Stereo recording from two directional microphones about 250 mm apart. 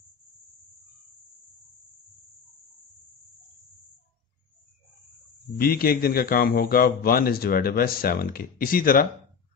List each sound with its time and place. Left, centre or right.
5.6 s a man's voice: left